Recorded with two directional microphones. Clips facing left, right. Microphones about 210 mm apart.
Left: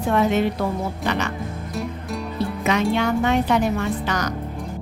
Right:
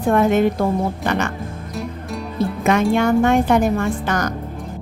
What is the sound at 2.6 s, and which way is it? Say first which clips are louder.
A woman's voice: right 4 dB; 50° right (ahead or behind).